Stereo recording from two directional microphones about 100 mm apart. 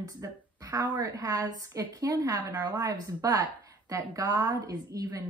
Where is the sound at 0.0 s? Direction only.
35° right (ahead or behind).